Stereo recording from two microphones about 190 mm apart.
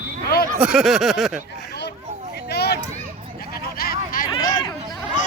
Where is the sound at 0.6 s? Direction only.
Centre (ahead or behind).